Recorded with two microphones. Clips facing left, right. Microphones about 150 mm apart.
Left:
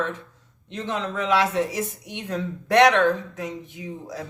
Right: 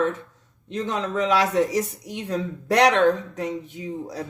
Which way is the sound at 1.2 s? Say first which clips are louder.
Right 2 dB; 35° right (ahead or behind).